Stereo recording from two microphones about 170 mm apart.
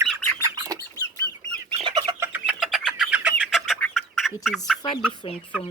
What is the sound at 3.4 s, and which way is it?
Chicken, centre (ahead or behind).